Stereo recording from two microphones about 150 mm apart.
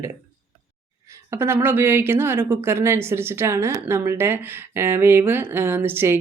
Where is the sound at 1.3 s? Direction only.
15° right (ahead or behind).